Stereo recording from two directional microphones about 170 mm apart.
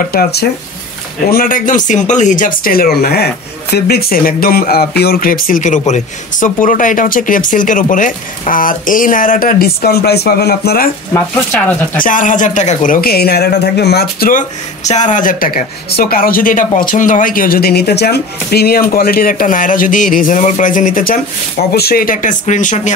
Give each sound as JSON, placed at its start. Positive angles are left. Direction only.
{"t": 0.1, "sound": "speech", "side_deg": 65}
{"t": 1.3, "sound": "speech", "side_deg": 55}
{"t": 11.5, "sound": "speech", "side_deg": 10}
{"t": 12.0, "sound": "speech", "side_deg": 50}
{"t": 14.9, "sound": "speech", "side_deg": 45}